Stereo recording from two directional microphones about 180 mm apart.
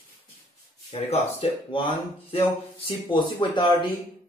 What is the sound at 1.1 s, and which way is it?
Speech, 30° left (ahead or behind).